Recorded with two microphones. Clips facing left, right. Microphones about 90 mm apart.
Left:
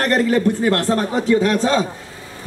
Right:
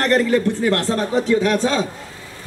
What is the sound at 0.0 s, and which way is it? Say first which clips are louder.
A man's voice: even; 45° left (ahead or behind).